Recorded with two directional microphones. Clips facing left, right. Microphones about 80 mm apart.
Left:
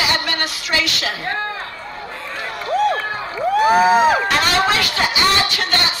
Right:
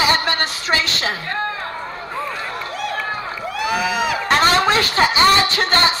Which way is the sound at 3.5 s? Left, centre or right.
Left.